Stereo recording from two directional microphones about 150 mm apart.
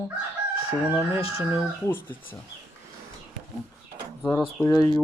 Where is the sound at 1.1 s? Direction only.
40° left (ahead or behind).